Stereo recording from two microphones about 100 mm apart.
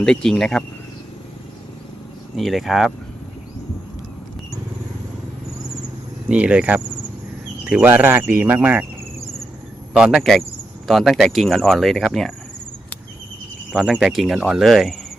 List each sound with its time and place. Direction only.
0.0 s speech: 5° left (ahead or behind)
2.3 s speech: centre (ahead or behind)
6.2 s speech: 10° right (ahead or behind)
9.9 s speech: 10° right (ahead or behind)
13.7 s speech: 5° right (ahead or behind)